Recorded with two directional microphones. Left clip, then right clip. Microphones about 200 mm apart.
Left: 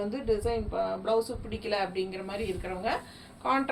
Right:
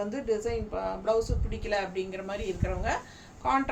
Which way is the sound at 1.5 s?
15° right (ahead or behind).